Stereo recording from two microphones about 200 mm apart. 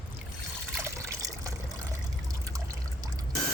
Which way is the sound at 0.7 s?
15° right (ahead or behind).